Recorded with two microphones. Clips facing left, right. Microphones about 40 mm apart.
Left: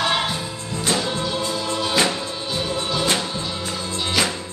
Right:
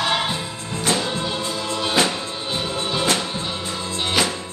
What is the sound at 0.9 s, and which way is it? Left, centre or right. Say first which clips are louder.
Music: left 2 dB; centre.